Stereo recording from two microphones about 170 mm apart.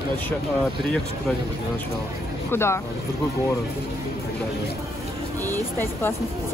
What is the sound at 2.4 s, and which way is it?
Speech, 15° left (ahead or behind).